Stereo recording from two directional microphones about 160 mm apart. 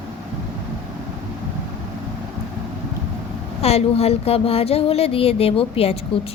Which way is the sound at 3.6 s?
40° left (ahead or behind).